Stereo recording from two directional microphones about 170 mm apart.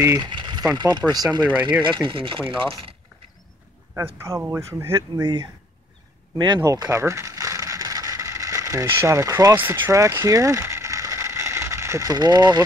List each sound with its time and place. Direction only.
0.0 s a sound: 25° right (ahead or behind)
0.7 s speech: 25° right (ahead or behind)
1.5 s speech: 10° right (ahead or behind)
2.0 s speech: 30° right (ahead or behind)
3.9 s speech: 15° right (ahead or behind)
6.3 s a sound: 25° right (ahead or behind)